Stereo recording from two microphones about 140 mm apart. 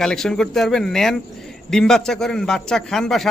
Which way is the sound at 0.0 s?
5° left (ahead or behind).